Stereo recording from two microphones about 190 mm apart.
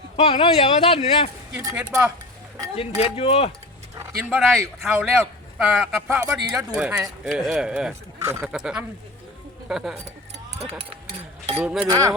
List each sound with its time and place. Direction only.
0.2 s speech: 30° left (ahead or behind)
1.7 s speech: 10° right (ahead or behind)
2.7 s speech: 30° left (ahead or behind)
4.3 s speech: centre (ahead or behind)
6.1 s speech: 15° right (ahead or behind)
11.6 s speech: centre (ahead or behind)
11.9 s speech: 20° right (ahead or behind)